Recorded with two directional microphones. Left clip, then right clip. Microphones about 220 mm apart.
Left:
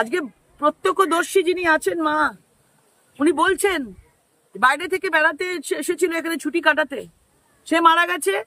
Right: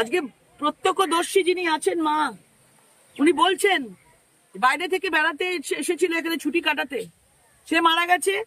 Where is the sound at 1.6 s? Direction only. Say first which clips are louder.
Left 4 dB; 20° left (ahead or behind).